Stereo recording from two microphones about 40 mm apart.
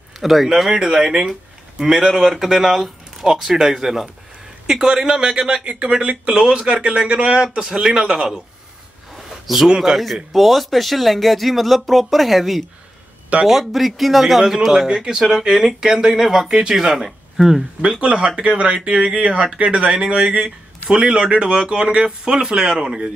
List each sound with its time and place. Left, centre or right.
0.2 s speech: centre
9.5 s speech: centre
9.9 s speech: centre
10.3 s speech: centre
18.0 s speech: right